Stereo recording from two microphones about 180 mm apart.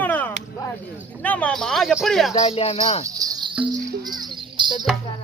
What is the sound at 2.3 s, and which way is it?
Speech, 35° left (ahead or behind).